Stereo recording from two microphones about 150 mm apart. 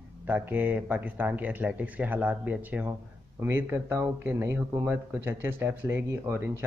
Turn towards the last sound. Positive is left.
turn(degrees=-15)  # may be behind; listen again after turning